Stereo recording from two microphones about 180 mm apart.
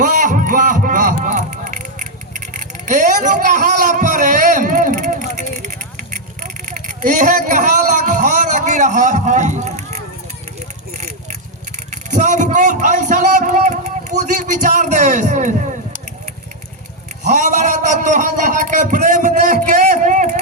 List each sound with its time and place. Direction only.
0.0 s a sound: 45° right (ahead or behind)
2.8 s a man's voice: 45° right (ahead or behind)
11.9 s a man's voice: 45° right (ahead or behind)
17.2 s a man's voice: 45° right (ahead or behind)